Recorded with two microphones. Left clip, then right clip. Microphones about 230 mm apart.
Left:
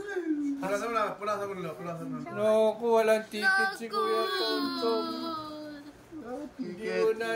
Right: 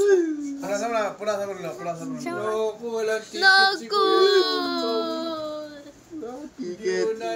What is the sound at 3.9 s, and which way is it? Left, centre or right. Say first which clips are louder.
Speech: right 11 dB; right.